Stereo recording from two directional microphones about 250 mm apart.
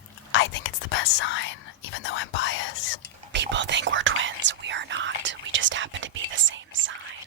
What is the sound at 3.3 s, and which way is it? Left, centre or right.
Whispering, right.